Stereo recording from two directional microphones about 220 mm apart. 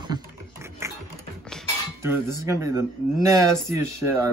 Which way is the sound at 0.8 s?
15° right (ahead or behind).